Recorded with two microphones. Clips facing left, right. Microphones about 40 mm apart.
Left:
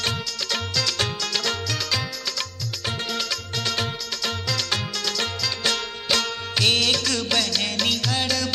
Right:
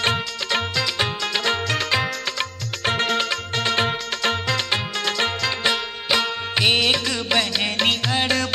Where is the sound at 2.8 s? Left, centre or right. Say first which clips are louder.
Right 7 dB; right.